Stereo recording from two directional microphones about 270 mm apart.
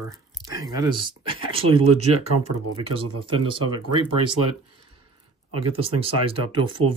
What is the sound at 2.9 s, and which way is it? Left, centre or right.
Speech, centre.